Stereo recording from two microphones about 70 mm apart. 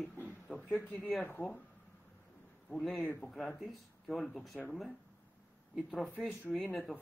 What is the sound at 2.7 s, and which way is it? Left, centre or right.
Speech, centre.